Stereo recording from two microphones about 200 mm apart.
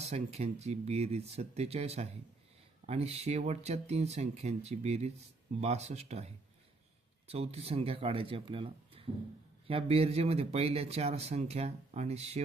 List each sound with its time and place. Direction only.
0.1 s speech: 35° right (ahead or behind)